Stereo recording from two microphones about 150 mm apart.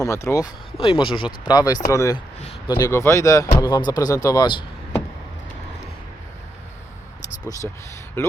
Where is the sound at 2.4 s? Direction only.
40° left (ahead or behind).